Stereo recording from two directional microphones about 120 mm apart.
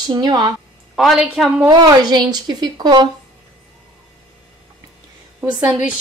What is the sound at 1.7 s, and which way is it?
A woman's voice, 35° right (ahead or behind).